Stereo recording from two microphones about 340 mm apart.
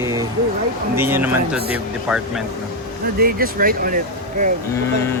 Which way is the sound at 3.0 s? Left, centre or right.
Right.